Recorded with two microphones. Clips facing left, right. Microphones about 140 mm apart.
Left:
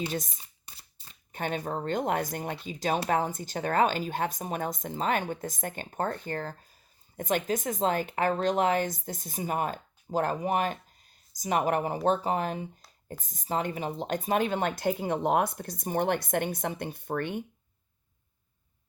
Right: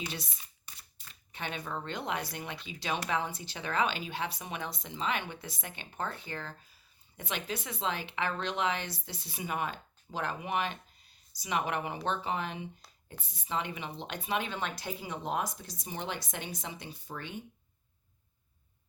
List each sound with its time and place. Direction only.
0.1 s speech: 45° left (ahead or behind)
0.6 s a sound: 30° left (ahead or behind)
1.3 s speech: 45° left (ahead or behind)